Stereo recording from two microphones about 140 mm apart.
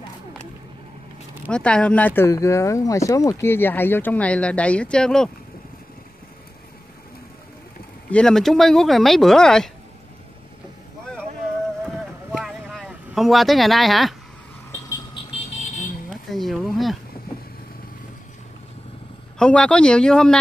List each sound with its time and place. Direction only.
1.5 s speech: 5° left (ahead or behind)
8.1 s speech: 5° left (ahead or behind)
12.4 s a sound: centre (ahead or behind)
15.3 s vehicle: 60° left (ahead or behind)
16.1 s a sound: centre (ahead or behind)
19.3 s speech: 5° left (ahead or behind)